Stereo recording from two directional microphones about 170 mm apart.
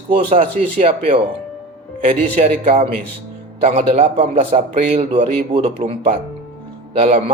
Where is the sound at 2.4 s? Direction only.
45° right (ahead or behind).